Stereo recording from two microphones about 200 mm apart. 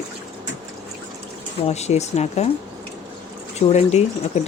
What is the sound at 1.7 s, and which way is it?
Speech, 35° left (ahead or behind).